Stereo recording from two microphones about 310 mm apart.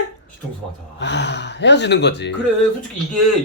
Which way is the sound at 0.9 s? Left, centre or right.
Left.